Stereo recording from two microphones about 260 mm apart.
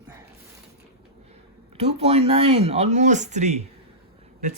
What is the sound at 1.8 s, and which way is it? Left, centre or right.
Speech, right.